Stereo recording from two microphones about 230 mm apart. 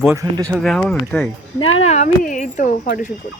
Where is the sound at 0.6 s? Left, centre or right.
Centre.